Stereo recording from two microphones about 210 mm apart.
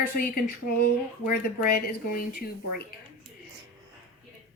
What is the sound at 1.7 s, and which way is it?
A woman's voice, 45° left (ahead or behind).